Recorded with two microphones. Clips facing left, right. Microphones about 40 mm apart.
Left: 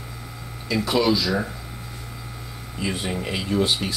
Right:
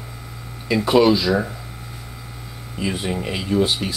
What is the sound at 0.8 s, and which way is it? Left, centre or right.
Speech, centre.